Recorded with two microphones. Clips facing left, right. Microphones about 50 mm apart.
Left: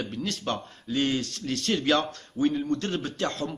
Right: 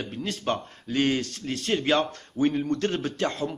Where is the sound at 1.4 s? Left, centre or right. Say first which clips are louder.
Left 1 dB; right.